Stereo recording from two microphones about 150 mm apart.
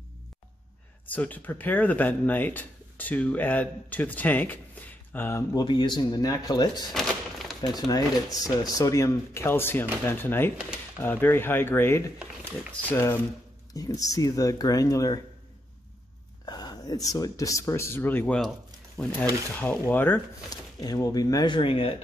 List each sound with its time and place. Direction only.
1.0 s speech: 10° left (ahead or behind)
5.5 s speech: 30° left (ahead or behind)
6.9 s a sound: centre (ahead or behind)
7.7 s speech: 25° left (ahead or behind)
12.2 s speech: 10° right (ahead or behind)
12.9 s speech: 15° left (ahead or behind)
16.4 s speech: 25° left (ahead or behind); by 18.5 s 5° left (ahead or behind)
19.8 s speech: 15° left (ahead or behind)
20.4 s speech: 25° left (ahead or behind)